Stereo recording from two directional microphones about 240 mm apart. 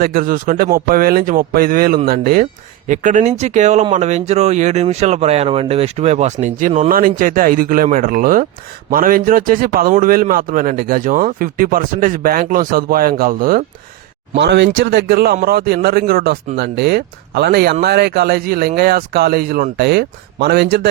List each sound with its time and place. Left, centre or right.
0.0 s a man's voice: right